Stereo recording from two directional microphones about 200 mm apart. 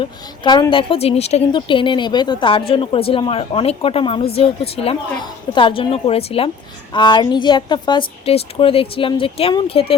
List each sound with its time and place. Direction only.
0.0 s speech: 20° left (ahead or behind)